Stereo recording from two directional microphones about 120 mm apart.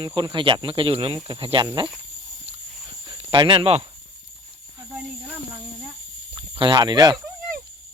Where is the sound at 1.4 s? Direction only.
50° right (ahead or behind).